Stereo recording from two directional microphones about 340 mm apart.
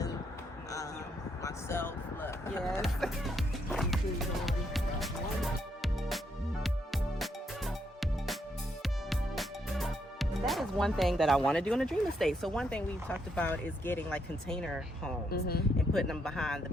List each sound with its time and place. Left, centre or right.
1.4 s skateboard: centre
8.8 s speech: centre
15.3 s speech: left
15.9 s speech: centre